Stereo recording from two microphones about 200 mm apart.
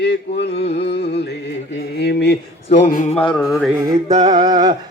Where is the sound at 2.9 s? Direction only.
40° left (ahead or behind).